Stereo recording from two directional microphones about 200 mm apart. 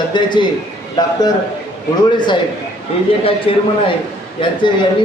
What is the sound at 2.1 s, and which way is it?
Speech, 25° left (ahead or behind).